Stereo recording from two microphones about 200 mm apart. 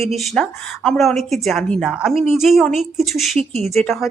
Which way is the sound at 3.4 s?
30° right (ahead or behind).